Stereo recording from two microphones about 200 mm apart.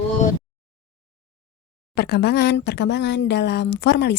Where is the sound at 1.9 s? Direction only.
55° left (ahead or behind).